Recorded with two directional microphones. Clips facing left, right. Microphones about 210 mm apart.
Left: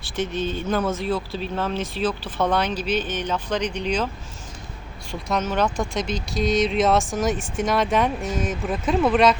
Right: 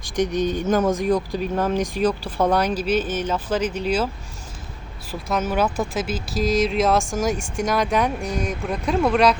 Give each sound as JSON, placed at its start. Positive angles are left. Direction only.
{"t": 0.0, "sound": "speech", "side_deg": -15}
{"t": 5.3, "sound": "speech", "side_deg": -10}